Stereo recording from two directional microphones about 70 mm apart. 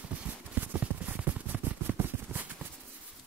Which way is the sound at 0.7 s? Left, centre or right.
Right.